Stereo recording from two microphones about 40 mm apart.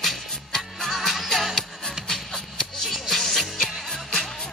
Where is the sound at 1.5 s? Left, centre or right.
Centre.